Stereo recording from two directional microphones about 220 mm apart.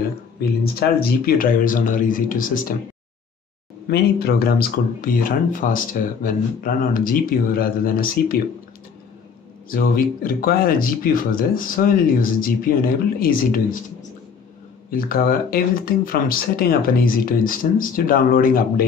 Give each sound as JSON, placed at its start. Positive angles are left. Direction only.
{"t": 1.0, "sound": "speech", "side_deg": 40}
{"t": 3.8, "sound": "speech", "side_deg": 45}
{"t": 9.7, "sound": "speech", "side_deg": 40}
{"t": 14.9, "sound": "speech", "side_deg": 40}